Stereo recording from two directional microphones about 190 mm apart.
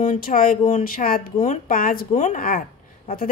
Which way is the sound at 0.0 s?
45° left (ahead or behind).